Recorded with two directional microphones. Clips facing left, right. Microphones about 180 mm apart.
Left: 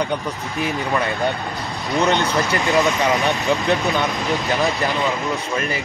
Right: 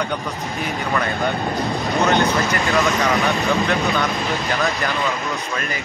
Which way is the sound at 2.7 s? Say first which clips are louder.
Left 2 dB; 20° left (ahead or behind).